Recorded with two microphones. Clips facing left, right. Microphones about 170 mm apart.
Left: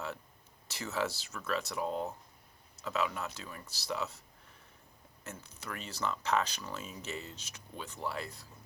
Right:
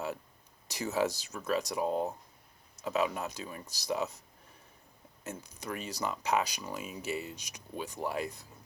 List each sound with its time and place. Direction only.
0.7 s speech: 15° right (ahead or behind)
5.2 s speech: 15° right (ahead or behind)